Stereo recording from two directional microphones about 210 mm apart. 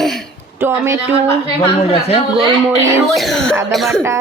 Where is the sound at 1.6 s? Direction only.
25° left (ahead or behind).